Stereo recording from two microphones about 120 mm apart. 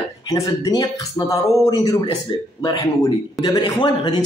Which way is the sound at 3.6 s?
40° left (ahead or behind).